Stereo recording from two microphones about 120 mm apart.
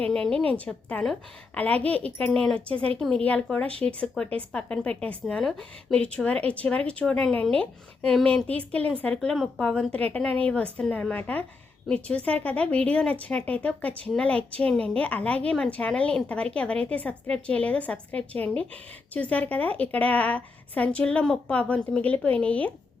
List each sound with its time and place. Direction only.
0.0 s a woman's voice: 5° left (ahead or behind)
2.7 s a woman's voice: 55° right (ahead or behind)
3.0 s a woman's voice: 5° left (ahead or behind)